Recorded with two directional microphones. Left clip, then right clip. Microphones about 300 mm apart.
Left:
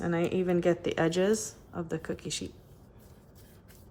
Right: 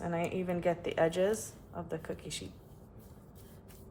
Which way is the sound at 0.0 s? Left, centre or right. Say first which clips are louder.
Left 5 dB; left.